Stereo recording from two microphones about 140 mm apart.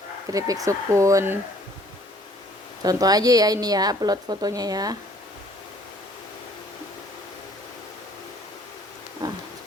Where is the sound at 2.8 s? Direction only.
25° right (ahead or behind).